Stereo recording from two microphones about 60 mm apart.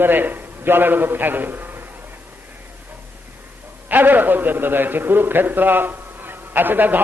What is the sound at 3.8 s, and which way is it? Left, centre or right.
A man's voice, right.